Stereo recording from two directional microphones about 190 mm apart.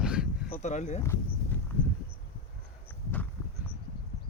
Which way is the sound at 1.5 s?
10° left (ahead or behind).